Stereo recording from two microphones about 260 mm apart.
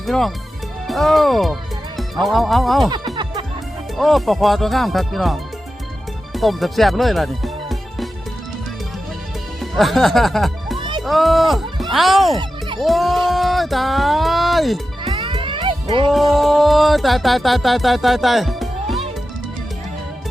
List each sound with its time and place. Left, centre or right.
0.0 s speech: centre
3.9 s speech: centre
6.3 s music: centre
9.6 s speech: centre
12.4 s music: centre
12.8 s speech: centre
15.0 s music: centre
16.1 s speech: centre